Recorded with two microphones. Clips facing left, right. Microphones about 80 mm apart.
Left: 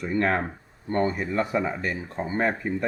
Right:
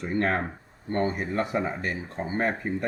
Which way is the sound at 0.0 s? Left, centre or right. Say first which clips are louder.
Left 2 dB; left.